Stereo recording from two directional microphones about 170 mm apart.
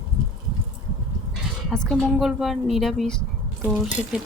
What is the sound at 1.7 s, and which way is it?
Speech, 5° left (ahead or behind).